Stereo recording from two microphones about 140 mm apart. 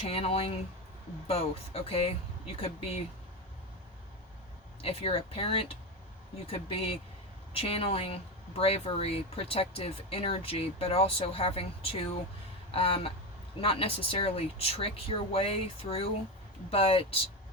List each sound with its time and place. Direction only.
0.1 s speech: 45° left (ahead or behind)
4.8 s speech: 45° left (ahead or behind)